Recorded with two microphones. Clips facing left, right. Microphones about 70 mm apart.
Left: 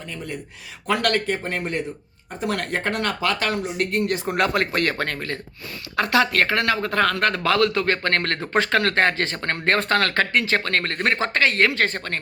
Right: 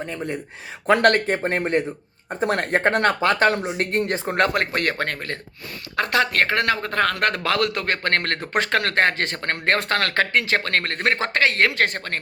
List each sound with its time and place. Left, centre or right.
0.0 s speech: right
7.1 s speech: right